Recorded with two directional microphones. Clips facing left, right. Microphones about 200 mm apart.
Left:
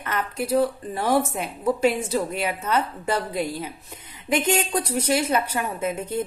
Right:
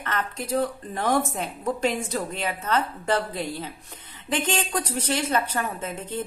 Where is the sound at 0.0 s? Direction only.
10° left (ahead or behind).